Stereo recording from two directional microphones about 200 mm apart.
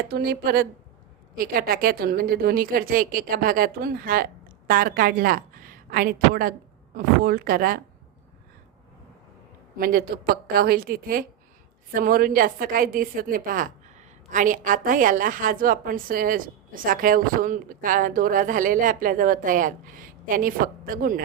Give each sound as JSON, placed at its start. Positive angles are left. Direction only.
{"t": 0.1, "sound": "a woman's voice", "side_deg": -50}
{"t": 9.7, "sound": "a woman's voice", "side_deg": -45}